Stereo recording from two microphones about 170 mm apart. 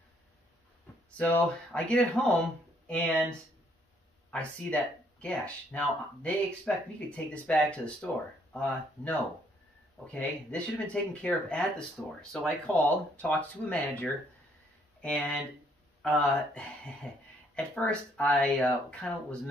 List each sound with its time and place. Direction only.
1.1 s speech: 10° left (ahead or behind)